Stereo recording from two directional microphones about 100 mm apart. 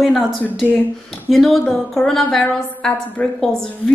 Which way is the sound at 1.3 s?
Centre (ahead or behind).